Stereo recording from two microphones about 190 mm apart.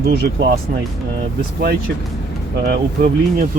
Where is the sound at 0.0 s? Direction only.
55° right (ahead or behind).